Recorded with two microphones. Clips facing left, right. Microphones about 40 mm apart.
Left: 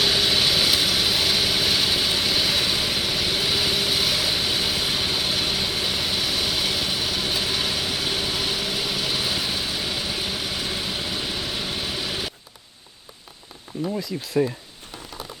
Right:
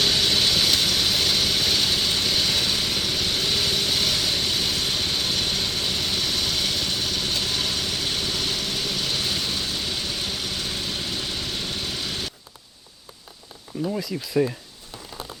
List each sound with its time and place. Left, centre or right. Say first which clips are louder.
0.0 s vehicle: left 1 dB; centre
13.7 s speech: even; left
14.4 s speech: even; centre